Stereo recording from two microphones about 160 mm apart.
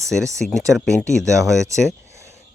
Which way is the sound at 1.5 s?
20° right (ahead or behind).